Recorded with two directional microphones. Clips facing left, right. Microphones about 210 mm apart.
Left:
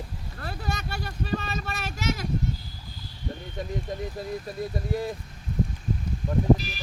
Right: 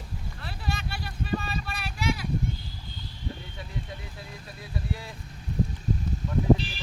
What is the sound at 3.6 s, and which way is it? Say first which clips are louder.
Speech: left 8 dB; 40° left (ahead or behind).